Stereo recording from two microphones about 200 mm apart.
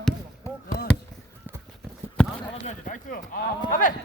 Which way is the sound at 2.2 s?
5° left (ahead or behind).